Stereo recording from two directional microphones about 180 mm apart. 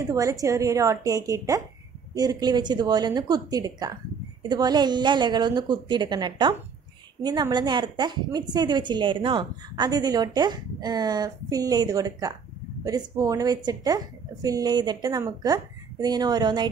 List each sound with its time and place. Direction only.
0.1 s a woman's voice: 20° right (ahead or behind)